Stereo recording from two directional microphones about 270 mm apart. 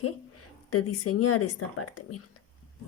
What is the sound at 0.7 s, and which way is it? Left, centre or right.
Speech, left.